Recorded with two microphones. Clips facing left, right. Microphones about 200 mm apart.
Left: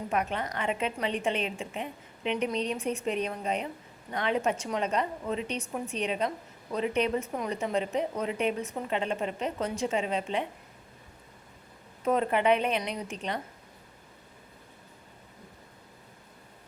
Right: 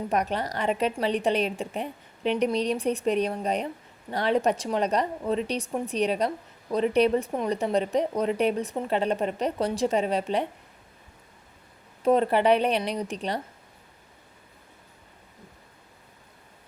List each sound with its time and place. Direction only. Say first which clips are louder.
0.1 s a woman's voice: right 2 dB; 35° right (ahead or behind)
12.0 s a woman's voice: right 4 dB; 35° right (ahead or behind)